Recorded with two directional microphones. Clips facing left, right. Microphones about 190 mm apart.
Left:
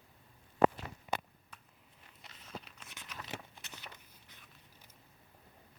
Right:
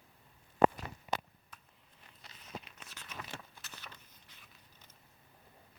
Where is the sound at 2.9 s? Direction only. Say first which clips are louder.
Left 1 dB; 15° left (ahead or behind).